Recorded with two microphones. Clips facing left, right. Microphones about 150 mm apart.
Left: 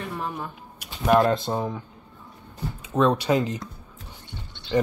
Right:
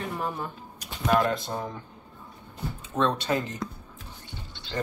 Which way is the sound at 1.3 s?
25° left (ahead or behind).